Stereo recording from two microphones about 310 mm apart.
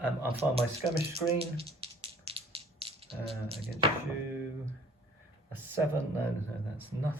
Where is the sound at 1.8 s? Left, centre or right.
Centre.